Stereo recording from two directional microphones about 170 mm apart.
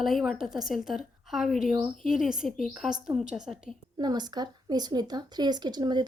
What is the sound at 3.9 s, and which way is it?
A woman's voice, 25° right (ahead or behind).